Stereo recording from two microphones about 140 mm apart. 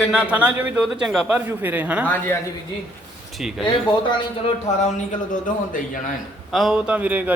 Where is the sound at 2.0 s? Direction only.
15° left (ahead or behind).